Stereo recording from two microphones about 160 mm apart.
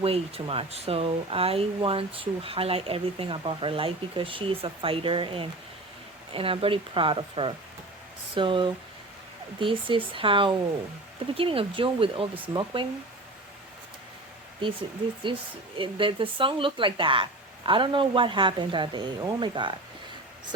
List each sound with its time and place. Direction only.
0.0 s speech: 35° right (ahead or behind)
14.6 s speech: 30° right (ahead or behind)